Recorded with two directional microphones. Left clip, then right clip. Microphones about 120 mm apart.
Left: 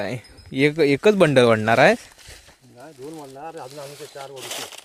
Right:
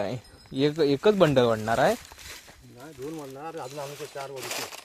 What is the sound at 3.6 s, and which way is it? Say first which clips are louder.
Speech: even; 20° left (ahead or behind).